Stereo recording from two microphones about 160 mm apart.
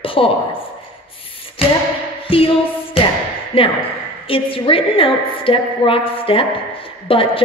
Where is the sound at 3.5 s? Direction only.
35° left (ahead or behind).